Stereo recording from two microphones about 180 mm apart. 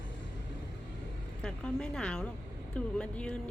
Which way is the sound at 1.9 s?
5° left (ahead or behind).